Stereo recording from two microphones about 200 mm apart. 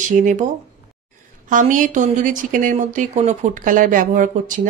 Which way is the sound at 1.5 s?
40° right (ahead or behind).